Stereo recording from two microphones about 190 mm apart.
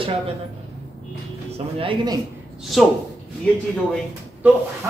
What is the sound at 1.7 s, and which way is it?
Speech, 25° right (ahead or behind).